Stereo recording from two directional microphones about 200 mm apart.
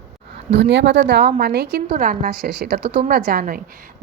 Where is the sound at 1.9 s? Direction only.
40° right (ahead or behind).